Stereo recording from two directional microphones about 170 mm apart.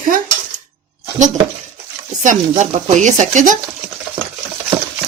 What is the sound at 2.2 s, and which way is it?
A woman's voice, 45° right (ahead or behind).